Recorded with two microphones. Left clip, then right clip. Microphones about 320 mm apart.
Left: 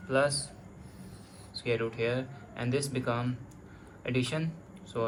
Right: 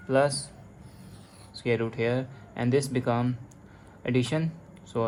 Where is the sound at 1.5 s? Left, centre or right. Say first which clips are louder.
Right 3 dB; right.